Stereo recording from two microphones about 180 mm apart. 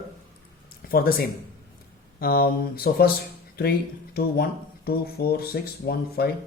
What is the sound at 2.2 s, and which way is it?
Speech, 55° left (ahead or behind).